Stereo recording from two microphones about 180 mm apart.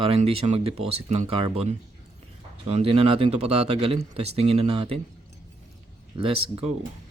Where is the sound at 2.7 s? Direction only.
35° right (ahead or behind).